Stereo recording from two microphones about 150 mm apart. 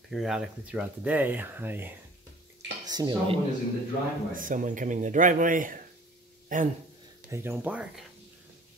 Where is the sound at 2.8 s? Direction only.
30° right (ahead or behind).